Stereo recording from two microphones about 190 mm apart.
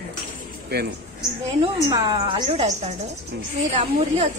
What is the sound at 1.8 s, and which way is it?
Speech, 20° right (ahead or behind).